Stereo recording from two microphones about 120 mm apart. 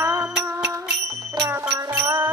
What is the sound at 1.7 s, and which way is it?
Music, 20° right (ahead or behind).